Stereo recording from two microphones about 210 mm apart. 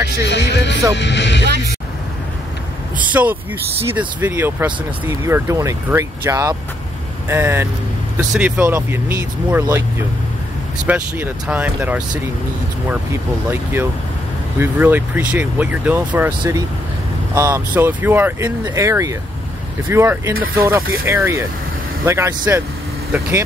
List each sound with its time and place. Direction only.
0.2 s music: 55° left (ahead or behind)
0.9 s speech: 55° left (ahead or behind)
3.1 s speech: 5° right (ahead or behind)